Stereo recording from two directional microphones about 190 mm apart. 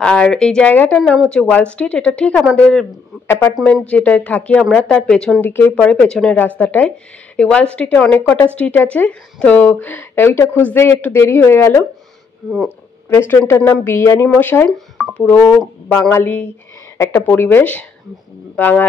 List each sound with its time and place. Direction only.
0.0 s speech: 5° left (ahead or behind)
12.4 s speech: 10° right (ahead or behind)
13.1 s speech: 10° left (ahead or behind)